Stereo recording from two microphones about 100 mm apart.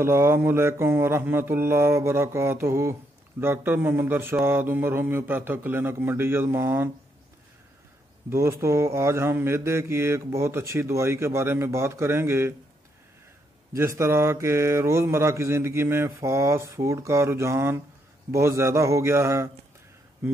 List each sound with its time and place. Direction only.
0.0 s mantra: 25° right (ahead or behind)
8.3 s mantra: 30° right (ahead or behind)
13.7 s mantra: 30° right (ahead or behind)